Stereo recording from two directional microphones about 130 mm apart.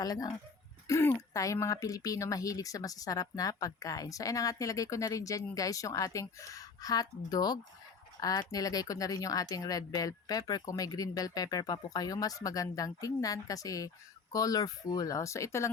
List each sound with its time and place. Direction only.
0.0 s speech: 30° left (ahead or behind)